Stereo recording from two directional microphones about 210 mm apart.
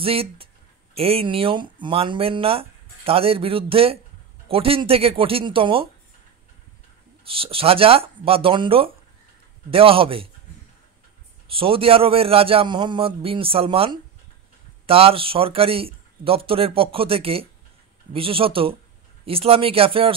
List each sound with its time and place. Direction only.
0.0 s speech: 25° right (ahead or behind)
7.2 s speech: 25° right (ahead or behind)
11.5 s speech: 25° right (ahead or behind)